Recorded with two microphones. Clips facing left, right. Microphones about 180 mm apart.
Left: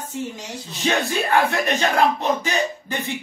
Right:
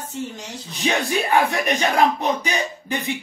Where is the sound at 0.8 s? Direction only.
15° right (ahead or behind).